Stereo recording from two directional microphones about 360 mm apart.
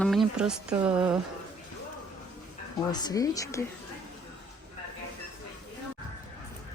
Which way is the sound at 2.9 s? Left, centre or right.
Centre.